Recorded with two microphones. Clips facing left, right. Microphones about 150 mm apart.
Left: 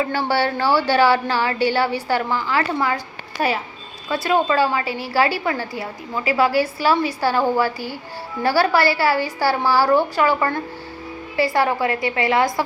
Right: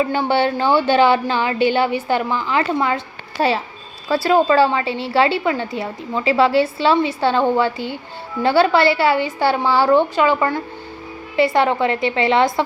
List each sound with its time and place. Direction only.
0.0 s a woman's voice: 20° right (ahead or behind)